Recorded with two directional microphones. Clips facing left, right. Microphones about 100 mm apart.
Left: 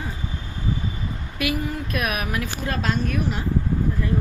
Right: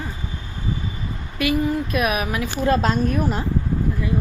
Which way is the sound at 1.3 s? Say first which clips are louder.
Right 6 dB; centre (ahead or behind).